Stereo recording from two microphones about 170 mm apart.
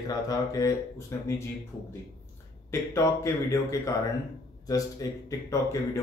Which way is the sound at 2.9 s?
20° left (ahead or behind).